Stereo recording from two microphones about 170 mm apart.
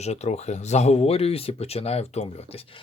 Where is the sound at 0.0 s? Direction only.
40° left (ahead or behind).